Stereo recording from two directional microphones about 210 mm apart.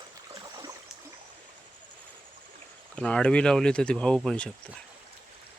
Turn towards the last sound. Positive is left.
turn(degrees=5)  # may be behind; listen again after turning